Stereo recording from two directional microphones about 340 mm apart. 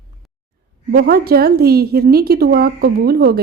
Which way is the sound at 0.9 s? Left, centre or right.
Right.